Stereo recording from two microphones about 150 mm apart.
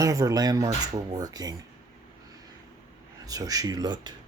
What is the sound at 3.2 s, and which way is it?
Speech, 25° right (ahead or behind).